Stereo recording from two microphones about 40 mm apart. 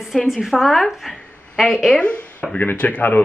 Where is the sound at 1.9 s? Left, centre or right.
Left.